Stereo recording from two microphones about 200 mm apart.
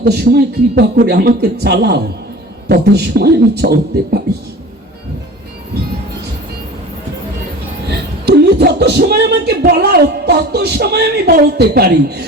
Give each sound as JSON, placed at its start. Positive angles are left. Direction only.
{"t": 0.3, "sound": "a man's voice", "side_deg": -50}
{"t": 7.9, "sound": "speech", "side_deg": -55}